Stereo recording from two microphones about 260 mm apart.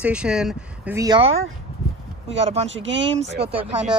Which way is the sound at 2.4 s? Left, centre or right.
Right.